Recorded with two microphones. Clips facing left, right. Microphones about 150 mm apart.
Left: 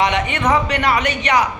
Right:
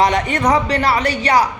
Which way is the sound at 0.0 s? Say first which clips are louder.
Right 2 dB; 35° right (ahead or behind).